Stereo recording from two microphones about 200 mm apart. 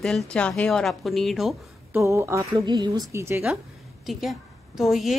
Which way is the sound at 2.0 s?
15° right (ahead or behind).